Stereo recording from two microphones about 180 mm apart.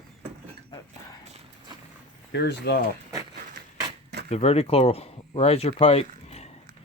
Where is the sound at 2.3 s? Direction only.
70° left (ahead or behind).